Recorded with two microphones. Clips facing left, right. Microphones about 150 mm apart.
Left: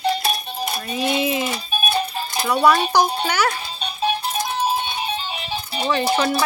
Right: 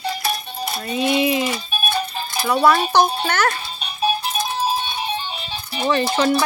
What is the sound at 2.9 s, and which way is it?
Speech, 10° left (ahead or behind).